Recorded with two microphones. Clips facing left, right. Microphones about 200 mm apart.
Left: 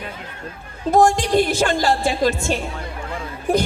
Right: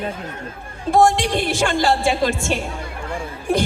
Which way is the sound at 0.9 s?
40° left (ahead or behind).